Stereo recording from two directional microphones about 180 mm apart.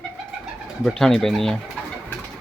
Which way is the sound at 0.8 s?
Centre (ahead or behind).